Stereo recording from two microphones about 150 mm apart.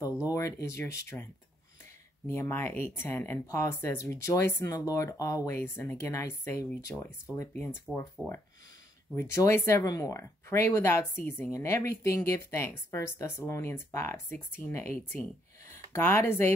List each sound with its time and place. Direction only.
0.2 s speech: 20° left (ahead or behind)
9.1 s speech: 20° left (ahead or behind)